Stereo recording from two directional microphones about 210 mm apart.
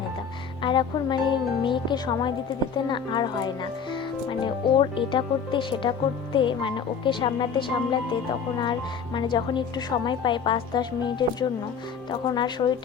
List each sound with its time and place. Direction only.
0.6 s a woman's voice: 20° left (ahead or behind)